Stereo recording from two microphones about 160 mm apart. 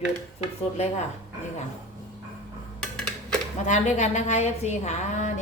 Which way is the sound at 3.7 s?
50° left (ahead or behind).